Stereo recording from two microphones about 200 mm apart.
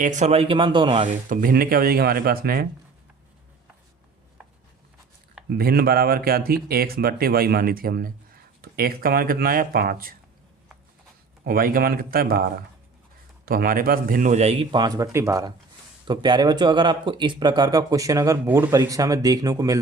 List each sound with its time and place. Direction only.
0.0 s speech: 35° right (ahead or behind)
1.0 s speech: 45° right (ahead or behind)
5.5 s speech: 50° right (ahead or behind)
11.4 s speech: 45° right (ahead or behind); by 19.8 s 15° right (ahead or behind)